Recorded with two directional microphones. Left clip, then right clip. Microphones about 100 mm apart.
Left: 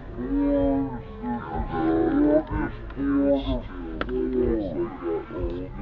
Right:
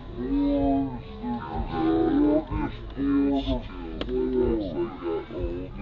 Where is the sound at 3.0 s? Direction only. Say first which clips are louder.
Left 2 dB; 30° left (ahead or behind).